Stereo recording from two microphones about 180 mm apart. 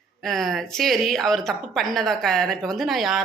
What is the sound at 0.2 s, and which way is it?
Speech, centre (ahead or behind).